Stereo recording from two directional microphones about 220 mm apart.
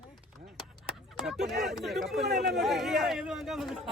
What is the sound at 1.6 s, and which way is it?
Chatter, centre (ahead or behind).